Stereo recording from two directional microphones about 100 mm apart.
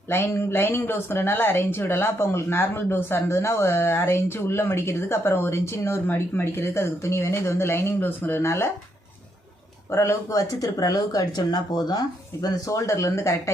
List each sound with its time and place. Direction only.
0.1 s speech: 25° left (ahead or behind)
9.9 s speech: 30° left (ahead or behind)